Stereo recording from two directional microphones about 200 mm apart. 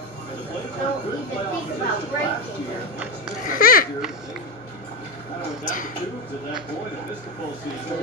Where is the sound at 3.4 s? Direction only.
45° left (ahead or behind).